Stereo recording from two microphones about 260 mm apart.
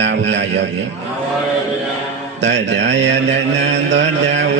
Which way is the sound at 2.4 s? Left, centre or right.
Right.